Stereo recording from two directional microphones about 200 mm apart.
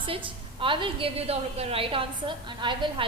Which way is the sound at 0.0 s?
25° right (ahead or behind).